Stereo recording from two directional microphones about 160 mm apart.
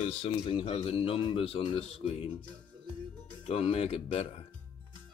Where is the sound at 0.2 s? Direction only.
35° left (ahead or behind).